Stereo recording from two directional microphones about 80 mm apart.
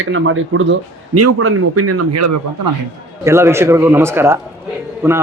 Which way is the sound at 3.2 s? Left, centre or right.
Right.